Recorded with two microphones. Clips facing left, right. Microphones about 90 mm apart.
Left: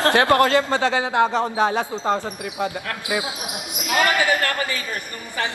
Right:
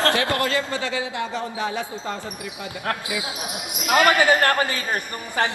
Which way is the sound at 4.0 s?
25° right (ahead or behind).